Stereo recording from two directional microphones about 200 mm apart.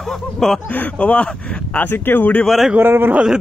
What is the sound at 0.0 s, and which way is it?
Speech, centre (ahead or behind).